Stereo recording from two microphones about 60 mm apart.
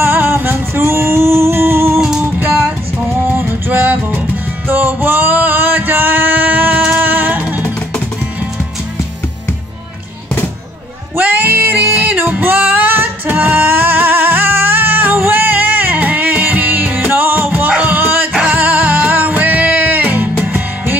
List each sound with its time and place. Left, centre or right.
0.0 s music: right
3.1 s music: right
11.1 s music: right